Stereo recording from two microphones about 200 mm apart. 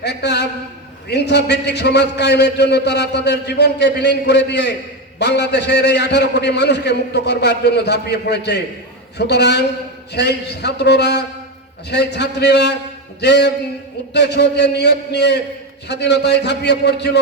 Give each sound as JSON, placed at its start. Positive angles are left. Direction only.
{"t": 0.0, "sound": "a man's voice", "side_deg": 55}